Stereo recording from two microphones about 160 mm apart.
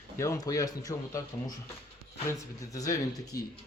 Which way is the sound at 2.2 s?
20° left (ahead or behind).